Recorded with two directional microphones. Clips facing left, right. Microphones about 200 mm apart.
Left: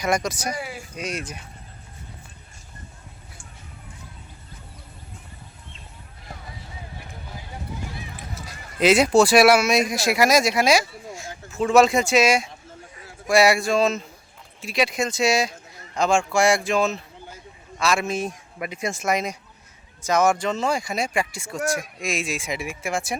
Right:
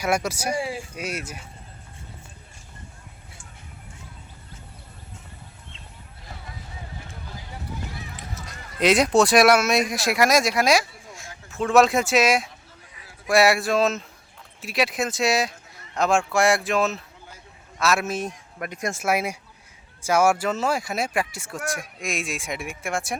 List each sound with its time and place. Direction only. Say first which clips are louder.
0.0 s speech: even; 5° right (ahead or behind)
0.5 s speech: right 5 dB; 30° right (ahead or behind)
0.9 s speech: left 1 dB; 5° right (ahead or behind)
8.4 s speech: left 2 dB; centre (ahead or behind)